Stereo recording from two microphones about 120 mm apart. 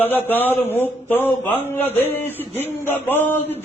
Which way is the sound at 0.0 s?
15° left (ahead or behind).